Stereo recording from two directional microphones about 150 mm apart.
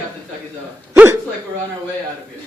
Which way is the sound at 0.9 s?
15° right (ahead or behind).